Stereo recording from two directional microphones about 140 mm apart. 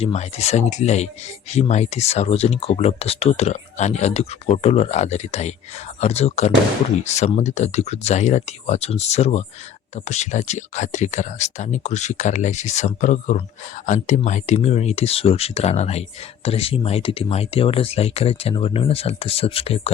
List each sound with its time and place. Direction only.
0.0 s speech: 50° left (ahead or behind)